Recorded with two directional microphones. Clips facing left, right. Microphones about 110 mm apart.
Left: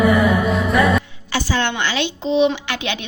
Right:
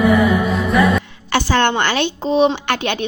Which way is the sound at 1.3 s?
60° right (ahead or behind).